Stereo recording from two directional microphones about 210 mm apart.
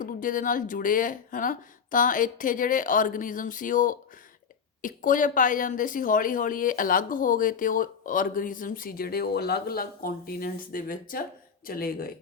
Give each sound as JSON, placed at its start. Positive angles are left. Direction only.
{"t": 0.0, "sound": "a woman's voice", "side_deg": 40}